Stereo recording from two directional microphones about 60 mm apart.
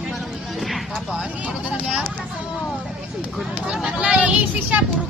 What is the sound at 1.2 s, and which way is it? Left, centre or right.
Speech, centre.